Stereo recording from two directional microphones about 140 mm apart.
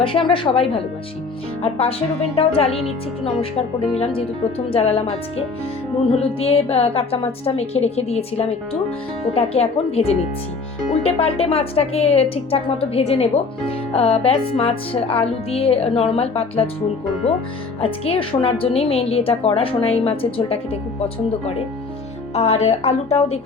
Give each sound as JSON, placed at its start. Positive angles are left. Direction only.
{"t": 0.0, "sound": "speech", "side_deg": 40}
{"t": 3.9, "sound": "speech", "side_deg": 40}
{"t": 6.1, "sound": "speech", "side_deg": 40}
{"t": 22.4, "sound": "speech", "side_deg": 50}